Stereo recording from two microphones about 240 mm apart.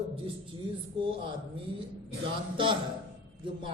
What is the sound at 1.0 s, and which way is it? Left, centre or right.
Speech, right.